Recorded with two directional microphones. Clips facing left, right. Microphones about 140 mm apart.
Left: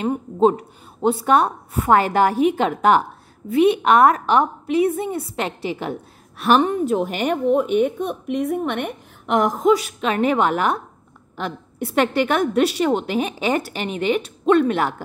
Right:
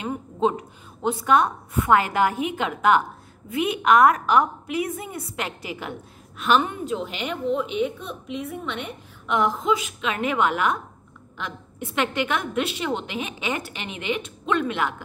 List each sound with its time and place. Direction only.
0.0 s a woman's voice: 40° left (ahead or behind)